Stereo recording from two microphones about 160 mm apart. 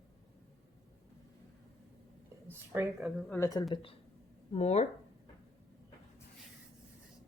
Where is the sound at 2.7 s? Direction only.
15° right (ahead or behind).